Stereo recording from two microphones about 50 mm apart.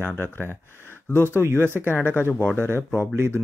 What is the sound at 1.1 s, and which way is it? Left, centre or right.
Speech, right.